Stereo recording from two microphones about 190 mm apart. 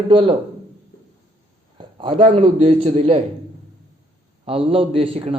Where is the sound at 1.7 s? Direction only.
25° right (ahead or behind).